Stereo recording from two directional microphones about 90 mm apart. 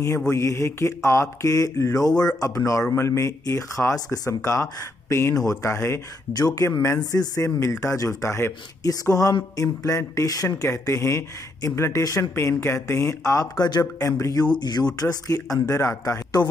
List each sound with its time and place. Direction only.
0.3 s speech: 30° left (ahead or behind)
2.4 s speech: 35° left (ahead or behind)
6.3 s speech: 40° left (ahead or behind)
9.1 s speech: 40° left (ahead or behind)
15.0 s speech: 40° left (ahead or behind)